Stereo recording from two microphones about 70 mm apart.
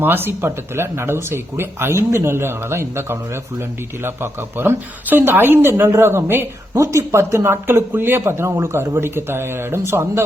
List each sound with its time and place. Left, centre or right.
0.0 s speech: right